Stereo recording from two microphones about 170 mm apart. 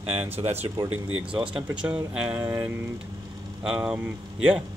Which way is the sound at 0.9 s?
5° right (ahead or behind).